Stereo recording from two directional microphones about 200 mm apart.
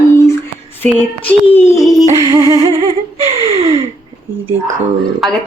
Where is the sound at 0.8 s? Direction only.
10° left (ahead or behind).